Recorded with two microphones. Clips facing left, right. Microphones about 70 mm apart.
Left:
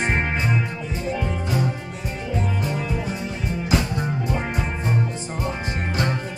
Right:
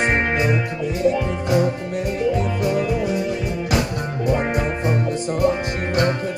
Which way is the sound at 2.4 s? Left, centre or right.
Centre.